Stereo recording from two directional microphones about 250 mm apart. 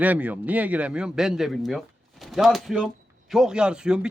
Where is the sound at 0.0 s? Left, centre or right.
Centre.